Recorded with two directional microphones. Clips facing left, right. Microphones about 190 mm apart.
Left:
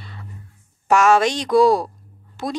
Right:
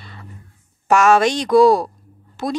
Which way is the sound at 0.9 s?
55° right (ahead or behind).